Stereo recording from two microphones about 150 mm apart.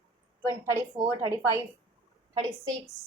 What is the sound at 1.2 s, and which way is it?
Speech, 20° right (ahead or behind).